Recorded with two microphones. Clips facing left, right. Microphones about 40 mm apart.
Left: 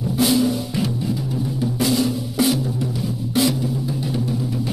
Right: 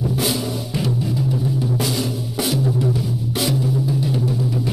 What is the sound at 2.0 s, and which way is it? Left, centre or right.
Drum, left.